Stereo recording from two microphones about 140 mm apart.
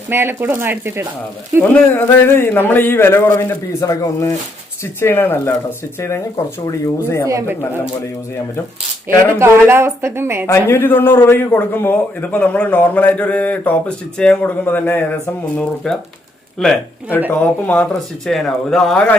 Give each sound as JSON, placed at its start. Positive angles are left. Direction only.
{"t": 0.1, "sound": "a woman's voice", "side_deg": -15}
{"t": 1.7, "sound": "a man's voice", "side_deg": 15}
{"t": 6.7, "sound": "speech", "side_deg": 20}
{"t": 7.3, "sound": "speech", "side_deg": -20}
{"t": 9.1, "sound": "a woman's voice", "side_deg": -20}
{"t": 10.4, "sound": "a man's voice", "side_deg": 20}